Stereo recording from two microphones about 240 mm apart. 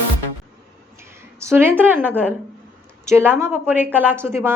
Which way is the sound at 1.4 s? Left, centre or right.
Centre.